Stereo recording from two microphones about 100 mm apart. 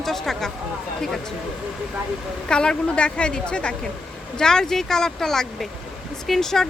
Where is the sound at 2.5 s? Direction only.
10° left (ahead or behind).